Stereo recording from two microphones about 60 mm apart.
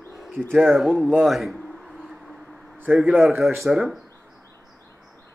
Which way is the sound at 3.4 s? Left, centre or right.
Centre.